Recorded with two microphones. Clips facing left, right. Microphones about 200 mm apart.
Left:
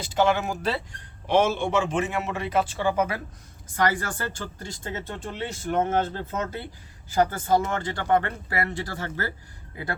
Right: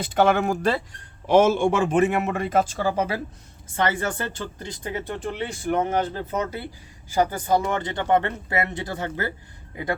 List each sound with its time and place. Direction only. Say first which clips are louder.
0.0 s a man's voice: right 3 dB; 60° right (ahead or behind); by 9.3 s 20° right (ahead or behind)